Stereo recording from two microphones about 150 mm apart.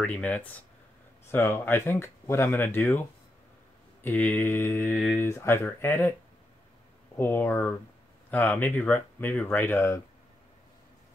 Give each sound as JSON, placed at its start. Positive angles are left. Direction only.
{"t": 0.0, "sound": "speech", "side_deg": 10}
{"t": 4.0, "sound": "speech", "side_deg": 10}
{"t": 7.2, "sound": "speech", "side_deg": 15}